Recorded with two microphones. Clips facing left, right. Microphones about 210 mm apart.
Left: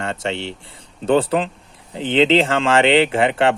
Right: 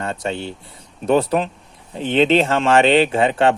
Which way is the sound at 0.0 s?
80° left.